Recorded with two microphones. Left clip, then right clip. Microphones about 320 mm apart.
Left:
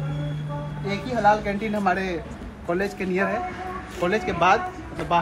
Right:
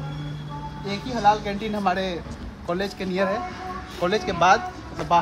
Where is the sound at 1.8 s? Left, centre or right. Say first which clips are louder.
Even; centre.